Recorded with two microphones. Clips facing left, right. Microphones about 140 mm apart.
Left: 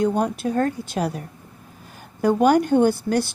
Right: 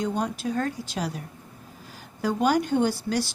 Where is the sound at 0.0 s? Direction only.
55° left (ahead or behind).